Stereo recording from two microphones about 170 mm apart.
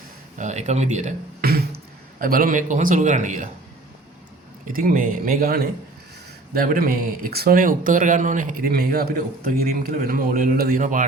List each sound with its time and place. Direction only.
0.3 s speech: 45° right (ahead or behind)
1.4 s speech: 65° right (ahead or behind); by 3.5 s 45° right (ahead or behind)
4.7 s speech: 50° right (ahead or behind)